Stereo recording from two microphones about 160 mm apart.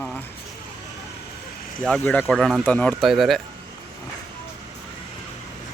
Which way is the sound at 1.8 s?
5° left (ahead or behind).